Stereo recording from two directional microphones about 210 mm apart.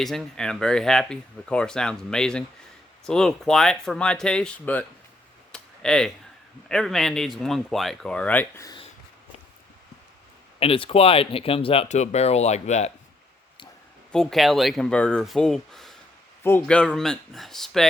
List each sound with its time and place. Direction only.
0.0 s speech: centre (ahead or behind)
5.5 s a sound: 5° left (ahead or behind)
6.7 s speech: centre (ahead or behind)
10.6 s speech: 25° left (ahead or behind)
14.1 s speech: centre (ahead or behind)